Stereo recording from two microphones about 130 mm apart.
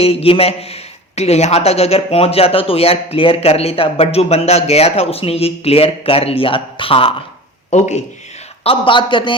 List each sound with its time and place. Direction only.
0.0 s a woman's voice: 50° left (ahead or behind)
7.7 s speech: 60° left (ahead or behind)
8.6 s a man's voice: 40° left (ahead or behind)